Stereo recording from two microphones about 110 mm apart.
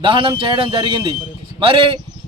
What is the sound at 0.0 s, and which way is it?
Speech, 50° right (ahead or behind).